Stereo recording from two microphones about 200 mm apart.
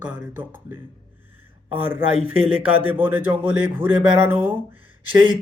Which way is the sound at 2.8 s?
10° right (ahead or behind).